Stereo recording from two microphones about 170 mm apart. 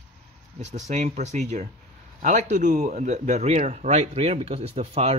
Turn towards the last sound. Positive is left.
turn(degrees=-40)  # may be behind; listen again after turning